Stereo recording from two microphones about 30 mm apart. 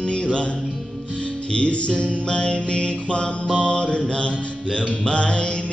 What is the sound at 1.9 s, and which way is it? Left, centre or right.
Music, left.